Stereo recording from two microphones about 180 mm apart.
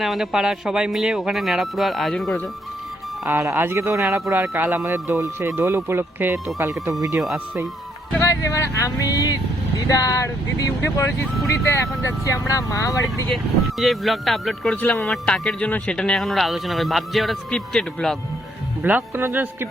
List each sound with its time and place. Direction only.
0.0 s speech: centre (ahead or behind)
3.2 s speech: 10° right (ahead or behind)
8.1 s speech: 15° left (ahead or behind)
13.3 s speech: centre (ahead or behind)
18.8 s speech: 10° right (ahead or behind)